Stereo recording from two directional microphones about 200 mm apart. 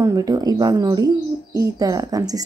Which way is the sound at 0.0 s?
20° right (ahead or behind).